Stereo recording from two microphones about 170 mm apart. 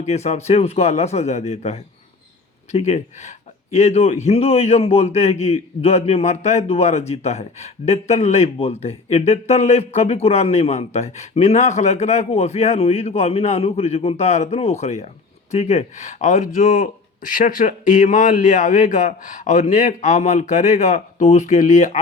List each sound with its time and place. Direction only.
0.0 s speech: 40° left (ahead or behind)